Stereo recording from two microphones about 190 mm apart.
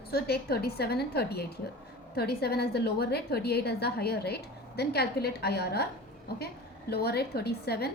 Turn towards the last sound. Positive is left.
turn(degrees=55)  # may be behind; listen again after turning